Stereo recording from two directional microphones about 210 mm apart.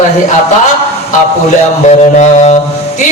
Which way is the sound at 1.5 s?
35° left (ahead or behind).